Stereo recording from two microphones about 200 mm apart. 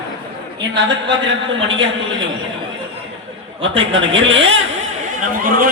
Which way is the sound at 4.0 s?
70° right (ahead or behind).